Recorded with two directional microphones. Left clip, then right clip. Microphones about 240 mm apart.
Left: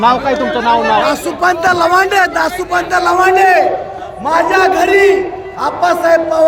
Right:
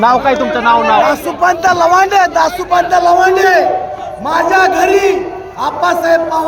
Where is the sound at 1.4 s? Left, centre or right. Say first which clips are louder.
Right 1 dB; centre.